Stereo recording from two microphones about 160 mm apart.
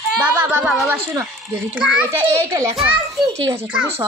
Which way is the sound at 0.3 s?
10° right (ahead or behind).